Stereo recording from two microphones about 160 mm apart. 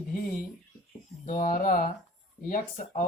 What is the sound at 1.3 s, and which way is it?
Speech, 55° left (ahead or behind).